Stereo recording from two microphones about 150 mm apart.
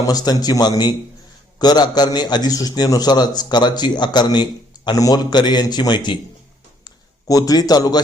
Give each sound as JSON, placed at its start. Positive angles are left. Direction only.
{"t": 0.0, "sound": "a man's voice", "side_deg": 25}